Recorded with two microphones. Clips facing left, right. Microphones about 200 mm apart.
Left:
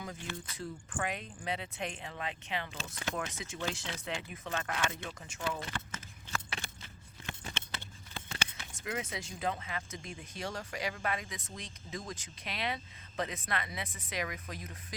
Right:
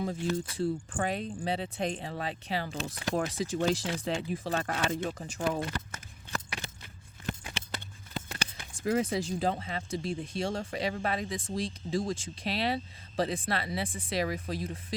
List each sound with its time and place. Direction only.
0.0 s speech: 30° right (ahead or behind)
5.7 s a sound: 40° right (ahead or behind)
8.1 s speech: 35° right (ahead or behind)